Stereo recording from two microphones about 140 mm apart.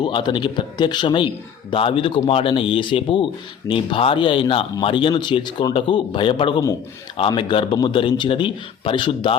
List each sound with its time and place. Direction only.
0.0 s a man's voice: 35° left (ahead or behind)